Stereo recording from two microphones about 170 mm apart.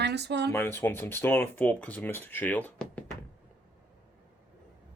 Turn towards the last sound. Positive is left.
turn(degrees=10)  # may be behind; listen again after turning